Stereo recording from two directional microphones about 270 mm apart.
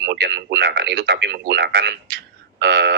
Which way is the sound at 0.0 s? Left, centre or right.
Right.